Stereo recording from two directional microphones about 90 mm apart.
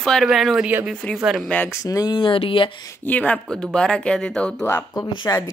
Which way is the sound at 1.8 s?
40° left (ahead or behind).